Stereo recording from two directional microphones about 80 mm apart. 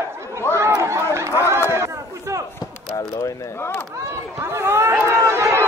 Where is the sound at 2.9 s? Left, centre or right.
Left.